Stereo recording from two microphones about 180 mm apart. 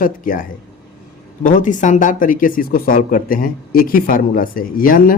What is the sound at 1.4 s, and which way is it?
Speech, 45° left (ahead or behind).